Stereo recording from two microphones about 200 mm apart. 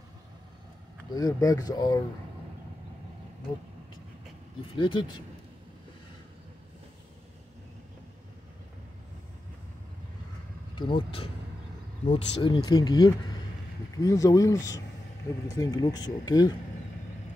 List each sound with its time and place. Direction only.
1.1 s speech: 15° left (ahead or behind)
4.6 s speech: 25° left (ahead or behind)
10.8 s speech: 25° left (ahead or behind)